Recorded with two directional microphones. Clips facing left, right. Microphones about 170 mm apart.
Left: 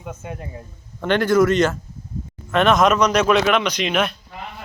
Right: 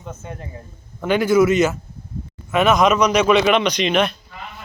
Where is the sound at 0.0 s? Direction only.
10° left (ahead or behind).